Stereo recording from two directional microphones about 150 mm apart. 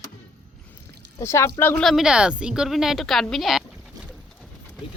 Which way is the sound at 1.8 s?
Centre (ahead or behind).